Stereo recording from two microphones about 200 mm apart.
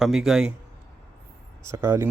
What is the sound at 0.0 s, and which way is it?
Speech, centre (ahead or behind).